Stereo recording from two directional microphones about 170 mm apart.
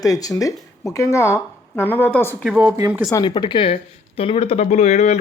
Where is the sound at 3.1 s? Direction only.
25° left (ahead or behind).